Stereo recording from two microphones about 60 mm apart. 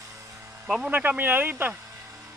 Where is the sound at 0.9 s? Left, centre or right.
Right.